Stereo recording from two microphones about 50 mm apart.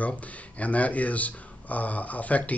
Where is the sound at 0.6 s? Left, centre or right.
Left.